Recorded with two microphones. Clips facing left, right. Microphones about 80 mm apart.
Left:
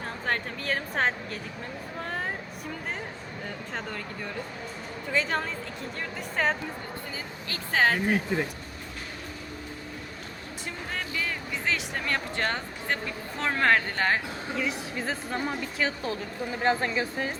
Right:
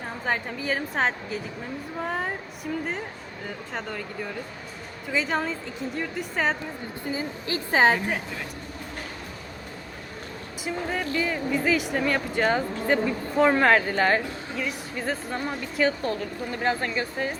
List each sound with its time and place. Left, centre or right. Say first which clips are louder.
0.3 s speech: right 3 dB; centre
3.4 s speech: right 3 dB; centre
7.1 s speech: right 8 dB; centre
10.7 s speech: right 7 dB; centre